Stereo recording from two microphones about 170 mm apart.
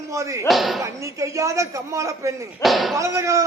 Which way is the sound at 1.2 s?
20° right (ahead or behind).